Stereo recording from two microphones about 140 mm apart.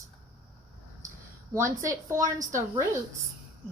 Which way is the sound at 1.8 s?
20° right (ahead or behind).